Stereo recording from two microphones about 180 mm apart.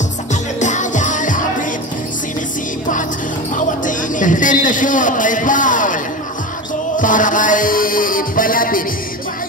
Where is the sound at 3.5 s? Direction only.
45° left (ahead or behind).